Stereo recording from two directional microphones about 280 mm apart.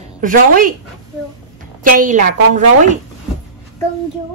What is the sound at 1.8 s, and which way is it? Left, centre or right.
A woman's voice, right.